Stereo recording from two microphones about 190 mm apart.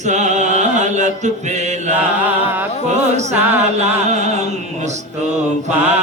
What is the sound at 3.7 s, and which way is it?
Music, 35° right (ahead or behind).